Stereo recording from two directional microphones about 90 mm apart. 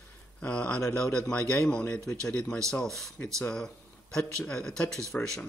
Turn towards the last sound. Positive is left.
turn(degrees=5)  # may be behind; listen again after turning